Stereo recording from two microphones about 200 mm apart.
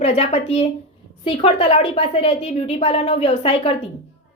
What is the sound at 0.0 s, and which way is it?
A woman's voice, 30° left (ahead or behind).